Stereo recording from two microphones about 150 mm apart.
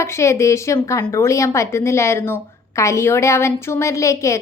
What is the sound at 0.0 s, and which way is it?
A woman's voice, 20° left (ahead or behind).